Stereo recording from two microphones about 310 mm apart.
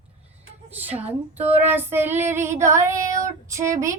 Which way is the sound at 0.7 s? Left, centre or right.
Centre.